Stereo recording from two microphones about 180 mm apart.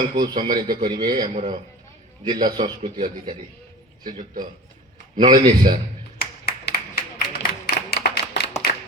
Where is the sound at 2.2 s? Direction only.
25° right (ahead or behind).